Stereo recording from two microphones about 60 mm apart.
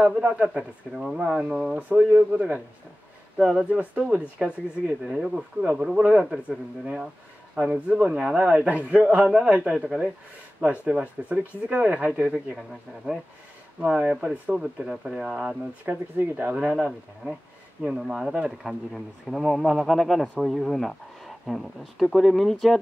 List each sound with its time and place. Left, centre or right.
0.2 s speech: centre
0.6 s speech: centre
1.1 s speech: centre
1.8 s speech: right
5.0 s speech: centre
6.2 s speech: centre
7.5 s speech: right
10.6 s speech: right
10.9 s speech: centre
13.8 s speech: centre
15.3 s speech: right
15.9 s speech: right
17.9 s speech: centre